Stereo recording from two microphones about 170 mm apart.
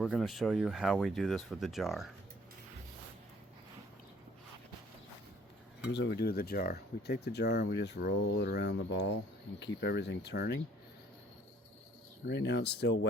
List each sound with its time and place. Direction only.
0.0 s speech: centre (ahead or behind)
5.9 s speech: 80° left
12.3 s speech: 90° left